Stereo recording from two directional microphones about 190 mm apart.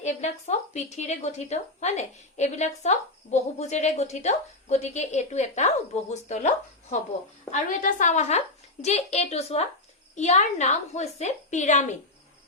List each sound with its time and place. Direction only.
0.0 s a woman's voice: 35° left (ahead or behind)
7.5 s a woman's voice: 45° left (ahead or behind)